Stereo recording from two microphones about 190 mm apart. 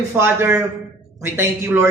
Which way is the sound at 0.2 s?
10° right (ahead or behind).